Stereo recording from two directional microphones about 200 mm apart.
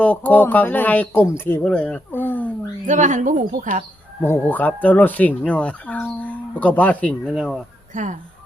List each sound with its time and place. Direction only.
0.0 s speech: 10° left (ahead or behind)
2.8 s a woman's voice: 40° right (ahead or behind)
4.2 s speech: 10° left (ahead or behind)
7.9 s a woman's voice: 40° right (ahead or behind)